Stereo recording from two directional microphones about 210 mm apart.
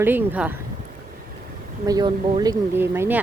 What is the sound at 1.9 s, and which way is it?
Speech, 20° right (ahead or behind).